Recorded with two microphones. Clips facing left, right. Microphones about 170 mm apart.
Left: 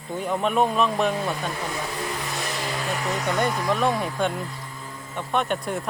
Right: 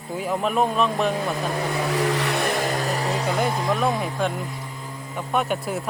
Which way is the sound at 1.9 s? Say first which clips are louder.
Right 8 dB; 80° right.